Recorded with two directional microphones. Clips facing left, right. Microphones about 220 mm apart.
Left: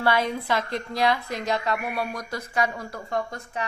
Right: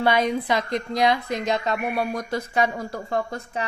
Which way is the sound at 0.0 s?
20° right (ahead or behind).